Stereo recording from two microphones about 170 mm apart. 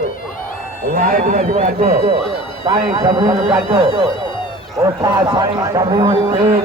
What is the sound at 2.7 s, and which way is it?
A man's voice, 25° right (ahead or behind).